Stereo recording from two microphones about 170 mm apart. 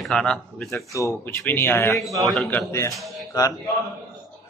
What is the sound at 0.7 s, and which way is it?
Speech, 15° left (ahead or behind).